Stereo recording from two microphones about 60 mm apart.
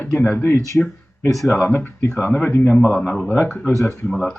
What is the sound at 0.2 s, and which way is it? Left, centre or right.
Speech, left.